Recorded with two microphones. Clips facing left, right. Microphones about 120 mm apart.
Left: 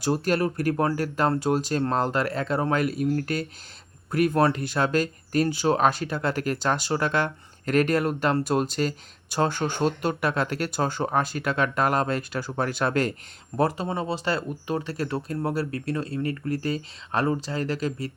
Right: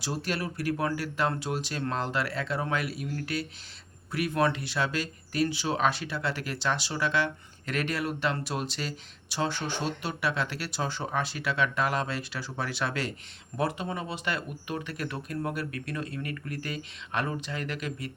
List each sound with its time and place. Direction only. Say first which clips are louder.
0.0 s speech: left 9 dB; 45° left (ahead or behind)
13.6 s speech: left 6 dB; 35° left (ahead or behind)